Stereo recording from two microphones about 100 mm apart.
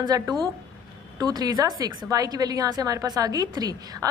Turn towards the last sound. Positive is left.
turn(degrees=-40)  # may be behind; listen again after turning